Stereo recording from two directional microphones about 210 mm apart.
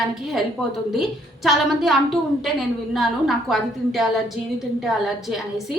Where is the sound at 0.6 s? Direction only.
Centre (ahead or behind).